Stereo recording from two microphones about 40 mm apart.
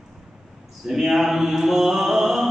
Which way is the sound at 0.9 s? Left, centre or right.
Centre.